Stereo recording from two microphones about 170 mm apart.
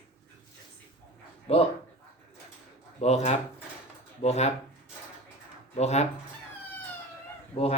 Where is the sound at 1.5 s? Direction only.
35° left (ahead or behind).